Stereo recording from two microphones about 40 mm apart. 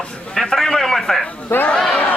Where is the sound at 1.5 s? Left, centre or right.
Left.